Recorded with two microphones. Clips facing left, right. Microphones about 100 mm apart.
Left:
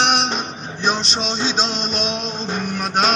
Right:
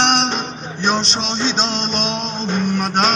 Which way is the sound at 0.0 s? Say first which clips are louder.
Right 2 dB; 5° left (ahead or behind).